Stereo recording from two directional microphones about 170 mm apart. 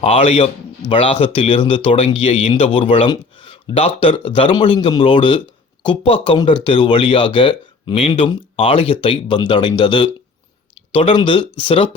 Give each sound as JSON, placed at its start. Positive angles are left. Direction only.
{"t": 0.0, "sound": "speech", "side_deg": 35}